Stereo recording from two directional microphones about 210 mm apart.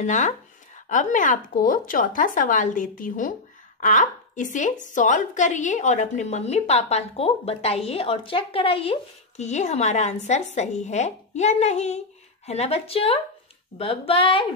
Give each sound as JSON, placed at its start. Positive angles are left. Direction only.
{"t": 0.0, "sound": "a woman's voice", "side_deg": 35}